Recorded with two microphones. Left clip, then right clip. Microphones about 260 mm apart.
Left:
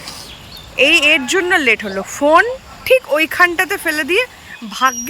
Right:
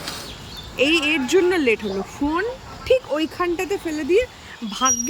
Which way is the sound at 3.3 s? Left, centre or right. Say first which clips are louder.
Left 10 dB; left.